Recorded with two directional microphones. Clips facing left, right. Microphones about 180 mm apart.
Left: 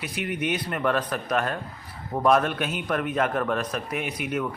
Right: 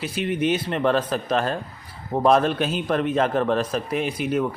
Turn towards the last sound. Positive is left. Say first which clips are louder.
# right 5 dB
turn(degrees=-30)  # may be behind; listen again after turning